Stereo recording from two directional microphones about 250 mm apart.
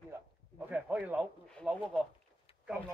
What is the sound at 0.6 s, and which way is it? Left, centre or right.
Speech, centre.